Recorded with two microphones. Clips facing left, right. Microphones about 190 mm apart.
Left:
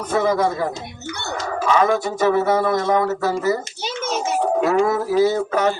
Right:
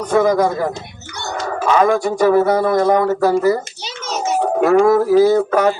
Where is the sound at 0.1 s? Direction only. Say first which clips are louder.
Right 4 dB; 50° right (ahead or behind).